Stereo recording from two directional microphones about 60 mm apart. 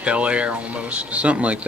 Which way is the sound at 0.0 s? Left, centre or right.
Centre.